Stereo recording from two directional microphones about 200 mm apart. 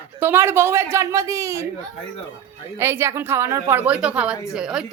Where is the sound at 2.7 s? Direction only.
10° right (ahead or behind).